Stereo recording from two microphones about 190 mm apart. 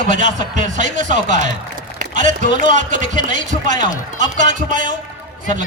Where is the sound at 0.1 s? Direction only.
40° right (ahead or behind).